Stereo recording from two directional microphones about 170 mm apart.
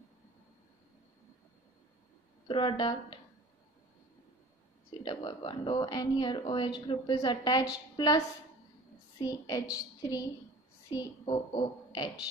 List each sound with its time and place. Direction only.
2.4 s speech: 30° left (ahead or behind)
5.0 s speech: 30° left (ahead or behind)
9.2 s a woman's voice: 20° left (ahead or behind)